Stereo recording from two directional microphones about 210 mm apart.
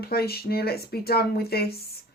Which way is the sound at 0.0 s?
45° left (ahead or behind).